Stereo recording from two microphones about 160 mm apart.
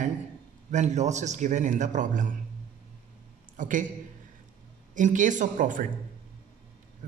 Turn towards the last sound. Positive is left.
turn(degrees=-55)  # may be behind; listen again after turning